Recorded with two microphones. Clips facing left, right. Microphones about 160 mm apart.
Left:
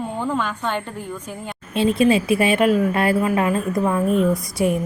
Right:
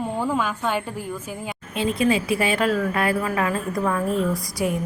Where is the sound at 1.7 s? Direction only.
25° left (ahead or behind).